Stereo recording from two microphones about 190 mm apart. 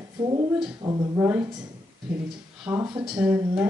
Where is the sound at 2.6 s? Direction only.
15° right (ahead or behind).